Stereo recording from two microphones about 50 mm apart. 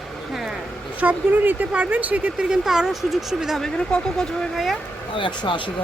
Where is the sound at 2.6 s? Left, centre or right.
Centre.